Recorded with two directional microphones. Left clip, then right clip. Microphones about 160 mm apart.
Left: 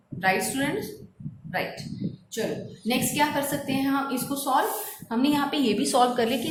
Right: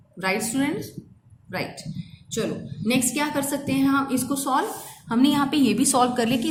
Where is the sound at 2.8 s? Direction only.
30° right (ahead or behind).